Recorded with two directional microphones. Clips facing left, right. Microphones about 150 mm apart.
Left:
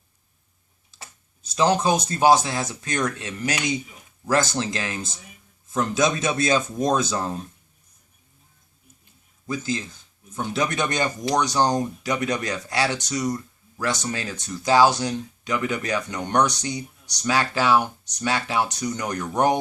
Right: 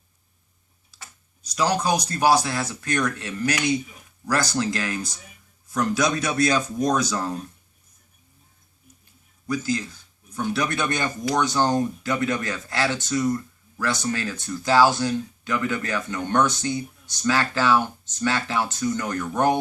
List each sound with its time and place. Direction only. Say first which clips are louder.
1.4 s speech: left 3 dB; 25° left (ahead or behind)
9.5 s speech: right 2 dB; 20° left (ahead or behind)